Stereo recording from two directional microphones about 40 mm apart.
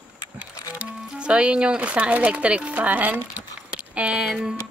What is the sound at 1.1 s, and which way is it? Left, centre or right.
Speech, right.